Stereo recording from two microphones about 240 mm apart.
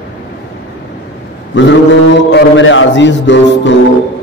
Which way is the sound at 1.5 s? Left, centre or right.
Left.